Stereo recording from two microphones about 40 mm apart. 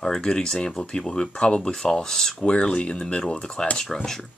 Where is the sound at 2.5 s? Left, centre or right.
Left.